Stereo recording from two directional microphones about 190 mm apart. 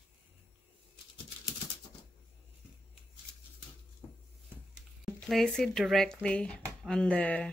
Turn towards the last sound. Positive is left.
turn(degrees=5)  # may be behind; listen again after turning